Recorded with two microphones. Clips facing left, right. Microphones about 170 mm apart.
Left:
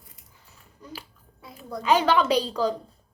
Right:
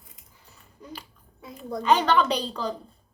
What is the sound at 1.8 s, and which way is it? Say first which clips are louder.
Speech: even; 5° left (ahead or behind).